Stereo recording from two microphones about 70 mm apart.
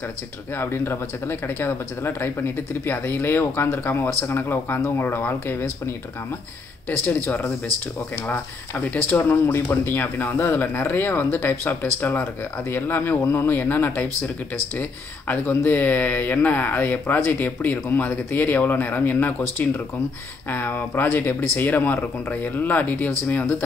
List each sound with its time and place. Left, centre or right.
0.6 s speech: left
8.3 s speech: left
20.4 s speech: left